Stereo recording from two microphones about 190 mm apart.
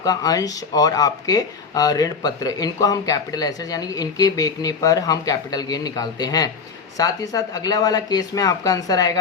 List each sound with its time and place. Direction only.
0.0 s speech: 20° left (ahead or behind)